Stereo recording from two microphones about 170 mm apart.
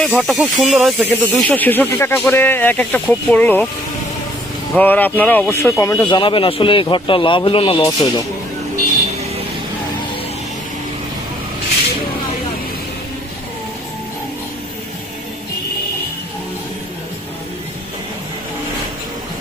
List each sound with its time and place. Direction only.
0.2 s speech: centre (ahead or behind)
4.8 s speech: 10° left (ahead or behind)
6.1 s speech: 30° left (ahead or behind)